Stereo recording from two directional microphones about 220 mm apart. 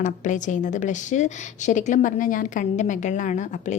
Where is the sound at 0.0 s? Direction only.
35° left (ahead or behind).